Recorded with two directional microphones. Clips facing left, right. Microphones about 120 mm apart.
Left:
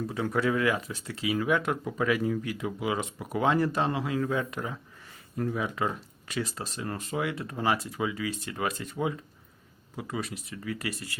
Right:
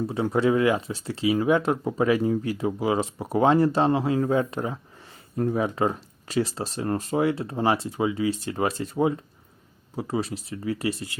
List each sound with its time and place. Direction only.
0.1 s speech: 25° right (ahead or behind)